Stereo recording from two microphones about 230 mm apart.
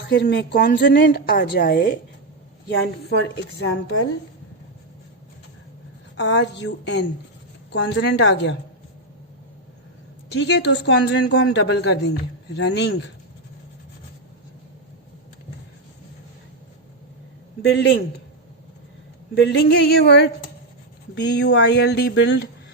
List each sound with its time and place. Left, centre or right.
0.1 s a man's voice: left
6.1 s a man's voice: left
10.3 s a man's voice: left
17.6 s a man's voice: left
19.3 s a man's voice: left